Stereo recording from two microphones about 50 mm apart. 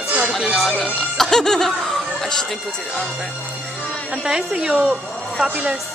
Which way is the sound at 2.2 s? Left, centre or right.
Centre.